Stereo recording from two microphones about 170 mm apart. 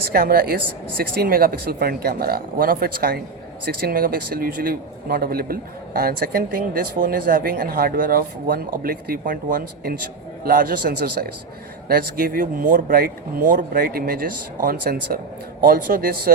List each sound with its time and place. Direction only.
0.1 s a man's voice: 60° right (ahead or behind)